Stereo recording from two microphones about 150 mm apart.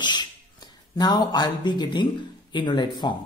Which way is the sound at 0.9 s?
30° left (ahead or behind).